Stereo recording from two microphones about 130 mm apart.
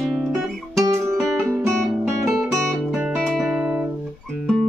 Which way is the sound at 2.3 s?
Centre (ahead or behind).